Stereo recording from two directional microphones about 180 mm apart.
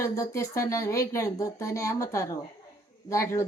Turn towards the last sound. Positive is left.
turn(degrees=15)  # may be behind; listen again after turning